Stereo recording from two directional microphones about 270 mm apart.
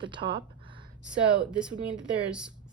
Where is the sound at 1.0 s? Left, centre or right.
Centre.